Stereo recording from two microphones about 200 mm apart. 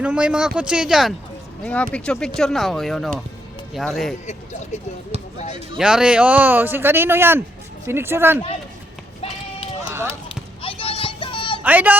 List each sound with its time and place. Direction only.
0.0 s speech: 5° right (ahead or behind)
5.7 s speech: 5° right (ahead or behind)
9.9 s basketball bounce: 15° right (ahead or behind)
10.6 s music: 25° left (ahead or behind)
11.6 s speech: 10° right (ahead or behind)